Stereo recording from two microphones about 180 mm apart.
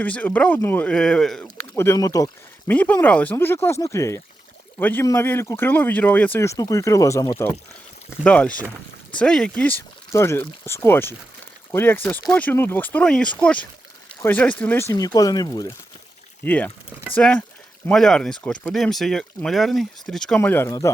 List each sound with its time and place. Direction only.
0.0 s speech: 10° left (ahead or behind)
1.7 s speech: 15° left (ahead or behind)
8.2 s speech: 5° left (ahead or behind)
16.4 s speech: 10° left (ahead or behind)